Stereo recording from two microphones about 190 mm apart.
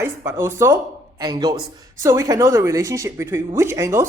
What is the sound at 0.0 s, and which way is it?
A woman's voice, 15° right (ahead or behind).